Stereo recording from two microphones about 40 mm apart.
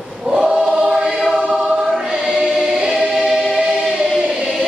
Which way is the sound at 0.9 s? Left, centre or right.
Centre.